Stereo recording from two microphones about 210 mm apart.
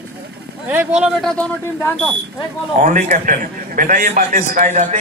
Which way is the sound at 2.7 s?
35° right (ahead or behind).